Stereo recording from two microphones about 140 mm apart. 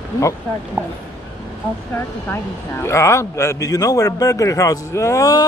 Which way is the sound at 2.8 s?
20° left (ahead or behind).